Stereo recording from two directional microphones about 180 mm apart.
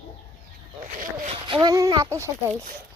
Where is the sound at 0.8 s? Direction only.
45° right (ahead or behind).